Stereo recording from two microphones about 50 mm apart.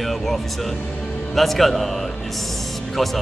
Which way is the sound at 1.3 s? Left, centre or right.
Centre.